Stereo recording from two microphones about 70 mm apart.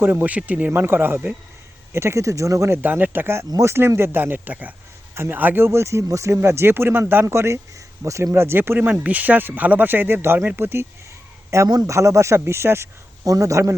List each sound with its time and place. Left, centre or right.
0.0 s speech: right
0.7 s speech: right
1.9 s speech: right
2.7 s speech: right
5.1 s speech: right
11.5 s speech: right
13.2 s speech: right